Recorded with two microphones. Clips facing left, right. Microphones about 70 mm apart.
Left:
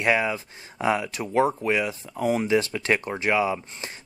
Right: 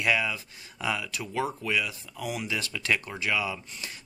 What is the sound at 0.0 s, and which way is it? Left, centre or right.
Speech, left.